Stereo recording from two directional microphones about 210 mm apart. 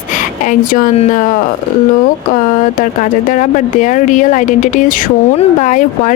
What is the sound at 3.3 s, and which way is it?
Speech, 35° left (ahead or behind).